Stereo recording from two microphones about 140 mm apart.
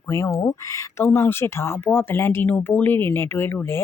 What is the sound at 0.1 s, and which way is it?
Speech, 20° left (ahead or behind).